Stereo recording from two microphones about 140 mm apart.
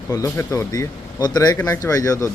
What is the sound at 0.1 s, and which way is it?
Speech, 25° left (ahead or behind).